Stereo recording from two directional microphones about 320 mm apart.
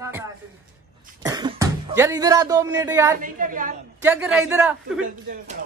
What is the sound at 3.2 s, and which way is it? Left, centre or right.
Speech, right.